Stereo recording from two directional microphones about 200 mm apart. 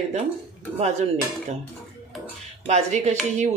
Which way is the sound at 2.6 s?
35° right (ahead or behind).